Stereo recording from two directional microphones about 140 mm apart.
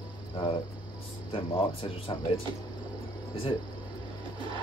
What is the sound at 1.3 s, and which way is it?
Speech, 40° left (ahead or behind).